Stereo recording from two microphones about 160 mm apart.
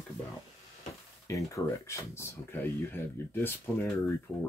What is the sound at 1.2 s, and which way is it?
Speech, 20° left (ahead or behind).